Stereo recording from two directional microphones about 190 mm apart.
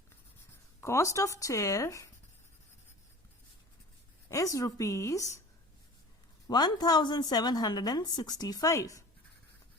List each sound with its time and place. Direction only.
0.8 s a woman's voice: 15° left (ahead or behind)
4.3 s a woman's voice: 15° left (ahead or behind)
6.5 s a woman's voice: 20° left (ahead or behind)